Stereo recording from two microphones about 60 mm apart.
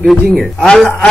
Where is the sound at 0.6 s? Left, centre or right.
Centre.